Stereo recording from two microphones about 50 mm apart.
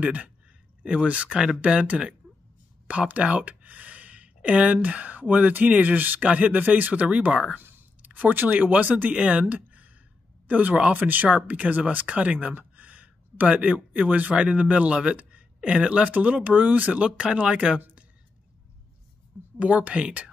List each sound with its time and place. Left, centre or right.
0.0 s speech: right
2.9 s a sound: right
4.7 s speech: right
7.1 s speech: right
7.5 s a sound: right
8.0 s speech: right
9.1 s speech: centre
12.5 s a sound: right
13.7 s speech: right
19.6 s speech: right